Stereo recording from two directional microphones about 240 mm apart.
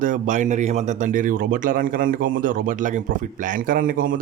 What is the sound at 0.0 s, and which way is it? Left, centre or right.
Speech, right.